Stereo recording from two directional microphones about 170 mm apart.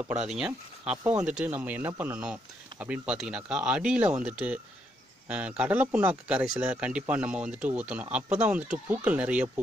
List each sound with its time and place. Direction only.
0.8 s speech: 5° right (ahead or behind)